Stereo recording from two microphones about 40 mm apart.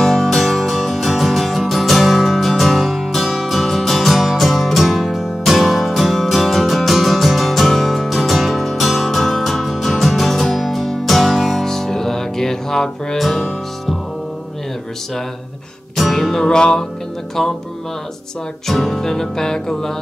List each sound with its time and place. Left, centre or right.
0.0 s music: centre
11.6 s music: centre
13.2 s music: centre
16.0 s music: centre
16.5 s music: centre
17.4 s music: centre
18.7 s music: centre